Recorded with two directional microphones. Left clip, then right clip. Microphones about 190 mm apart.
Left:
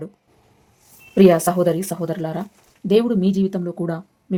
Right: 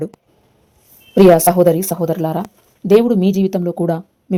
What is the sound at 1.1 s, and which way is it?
A woman's voice, 20° right (ahead or behind).